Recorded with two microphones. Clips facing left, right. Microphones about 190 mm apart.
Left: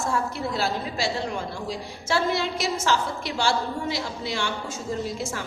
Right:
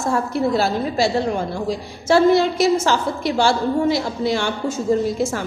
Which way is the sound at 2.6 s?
50° right (ahead or behind).